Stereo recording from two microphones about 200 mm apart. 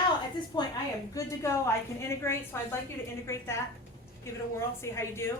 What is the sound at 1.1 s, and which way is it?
A woman's voice, 15° left (ahead or behind).